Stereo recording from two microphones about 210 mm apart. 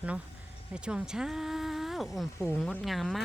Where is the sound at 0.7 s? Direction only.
5° right (ahead or behind).